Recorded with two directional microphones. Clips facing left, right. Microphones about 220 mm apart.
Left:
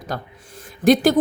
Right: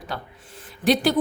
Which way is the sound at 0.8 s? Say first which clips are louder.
Left 5 dB; 45° left (ahead or behind).